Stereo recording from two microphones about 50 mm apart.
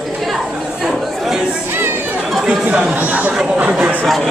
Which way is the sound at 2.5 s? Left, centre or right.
Right.